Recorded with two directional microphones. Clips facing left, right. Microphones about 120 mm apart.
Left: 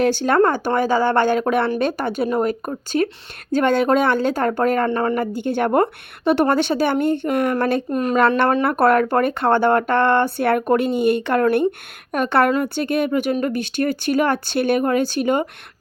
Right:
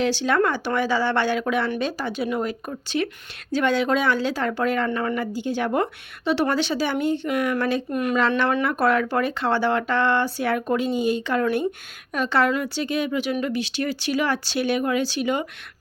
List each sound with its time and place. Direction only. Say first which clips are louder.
0.0 s speech: left 5 dB; 50° left (ahead or behind)
2.2 s speech: left 6 dB; 45° left (ahead or behind)
4.9 s speech: left 5 dB; 35° left (ahead or behind)
5.2 s speech: left 4 dB; 55° left (ahead or behind)
7.9 s speech: left 4 dB; 35° left (ahead or behind)
8.6 s speech: left 5 dB; 55° left (ahead or behind)